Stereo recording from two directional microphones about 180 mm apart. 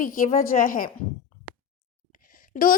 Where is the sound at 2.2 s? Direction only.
50° left (ahead or behind).